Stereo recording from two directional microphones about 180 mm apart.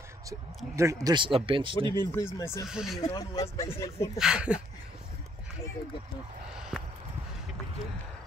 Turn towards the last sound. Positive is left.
turn(degrees=-5)  # may be behind; listen again after turning